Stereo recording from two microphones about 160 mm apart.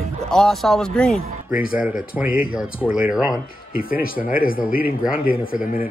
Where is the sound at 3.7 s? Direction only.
65° left (ahead or behind).